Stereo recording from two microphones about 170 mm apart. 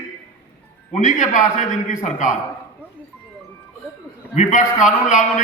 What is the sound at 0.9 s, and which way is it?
A man's voice, 45° left (ahead or behind).